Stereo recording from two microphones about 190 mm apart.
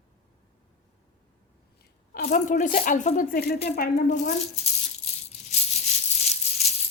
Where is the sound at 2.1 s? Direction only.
50° left (ahead or behind).